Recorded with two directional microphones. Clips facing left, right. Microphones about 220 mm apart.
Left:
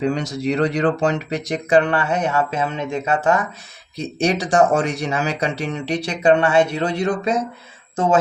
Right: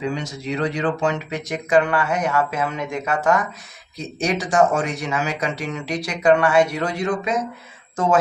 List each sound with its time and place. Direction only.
0.1 s speech: 40° left (ahead or behind)